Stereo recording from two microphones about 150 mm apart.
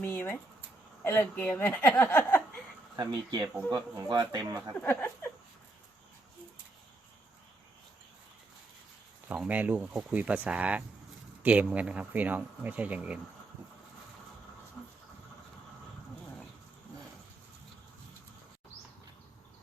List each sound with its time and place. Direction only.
0.0 s speech: 15° left (ahead or behind)
2.9 s speech: 25° right (ahead or behind)
4.8 s speech: 10° left (ahead or behind)
9.3 s speech: 10° right (ahead or behind)
14.8 s a sound: 5° left (ahead or behind)